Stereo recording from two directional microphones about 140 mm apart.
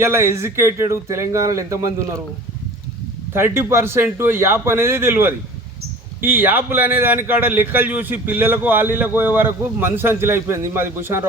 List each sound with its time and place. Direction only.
0.0 s speech: 20° right (ahead or behind)
3.3 s a man's voice: 15° right (ahead or behind)